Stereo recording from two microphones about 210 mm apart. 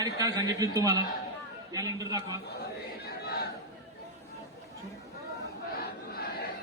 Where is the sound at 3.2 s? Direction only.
50° left (ahead or behind).